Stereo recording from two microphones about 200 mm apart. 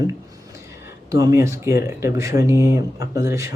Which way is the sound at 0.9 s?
15° right (ahead or behind).